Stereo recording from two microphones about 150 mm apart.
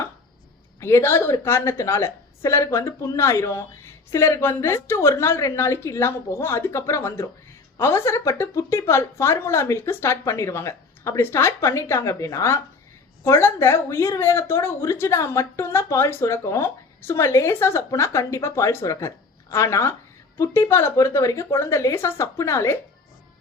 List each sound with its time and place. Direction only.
0.8 s a woman's voice: 15° left (ahead or behind)